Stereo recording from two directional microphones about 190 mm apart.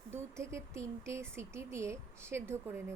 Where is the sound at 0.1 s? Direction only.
15° right (ahead or behind).